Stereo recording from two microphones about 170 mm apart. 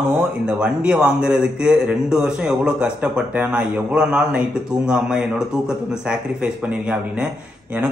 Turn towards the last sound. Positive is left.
turn(degrees=-5)  # may be behind; listen again after turning